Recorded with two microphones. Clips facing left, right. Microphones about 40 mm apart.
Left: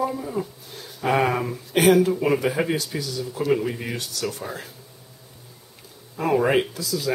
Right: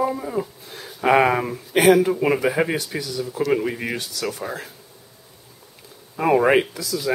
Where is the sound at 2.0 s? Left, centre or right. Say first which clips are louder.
Right 2 dB; right.